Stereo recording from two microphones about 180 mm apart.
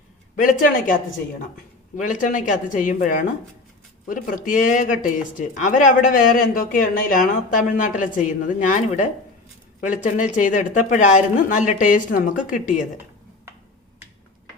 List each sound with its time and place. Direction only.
0.3 s speech: 50° left (ahead or behind)
2.0 s speech: 45° left (ahead or behind)